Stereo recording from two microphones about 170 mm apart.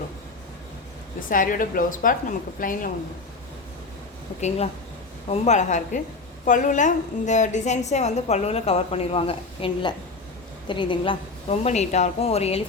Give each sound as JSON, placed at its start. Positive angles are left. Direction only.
{"t": 1.3, "sound": "a woman's voice", "side_deg": 55}
{"t": 4.4, "sound": "a woman's voice", "side_deg": 40}